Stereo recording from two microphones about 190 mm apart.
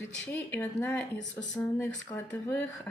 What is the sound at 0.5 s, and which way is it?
Speech, 10° left (ahead or behind).